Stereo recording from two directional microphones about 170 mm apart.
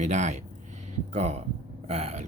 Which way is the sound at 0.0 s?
45° right (ahead or behind).